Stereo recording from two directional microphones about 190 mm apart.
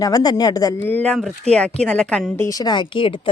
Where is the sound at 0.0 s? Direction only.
20° left (ahead or behind).